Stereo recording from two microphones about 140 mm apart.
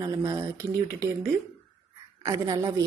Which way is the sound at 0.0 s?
25° right (ahead or behind).